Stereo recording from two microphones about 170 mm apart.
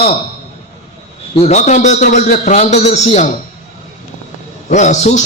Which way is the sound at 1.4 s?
40° left (ahead or behind).